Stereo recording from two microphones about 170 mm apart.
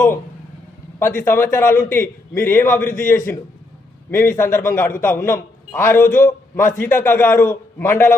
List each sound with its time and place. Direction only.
0.9 s a man's voice: 15° left (ahead or behind)